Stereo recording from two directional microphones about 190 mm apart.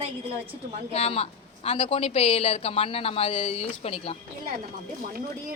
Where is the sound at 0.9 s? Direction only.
35° left (ahead or behind).